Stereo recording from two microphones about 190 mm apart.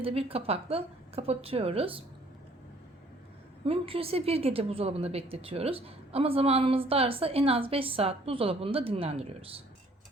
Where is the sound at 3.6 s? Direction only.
30° right (ahead or behind).